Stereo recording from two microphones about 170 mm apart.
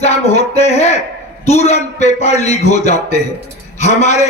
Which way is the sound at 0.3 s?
40° left (ahead or behind).